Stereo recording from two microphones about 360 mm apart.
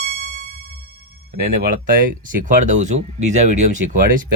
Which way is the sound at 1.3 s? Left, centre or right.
Right.